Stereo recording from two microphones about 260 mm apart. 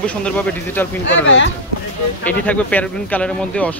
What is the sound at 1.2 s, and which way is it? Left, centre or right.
Speech, left.